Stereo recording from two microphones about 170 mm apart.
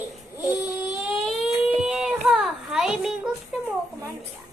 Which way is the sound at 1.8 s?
5° right (ahead or behind).